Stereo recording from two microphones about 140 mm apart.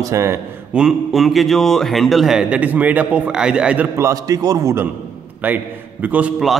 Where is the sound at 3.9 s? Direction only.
25° right (ahead or behind).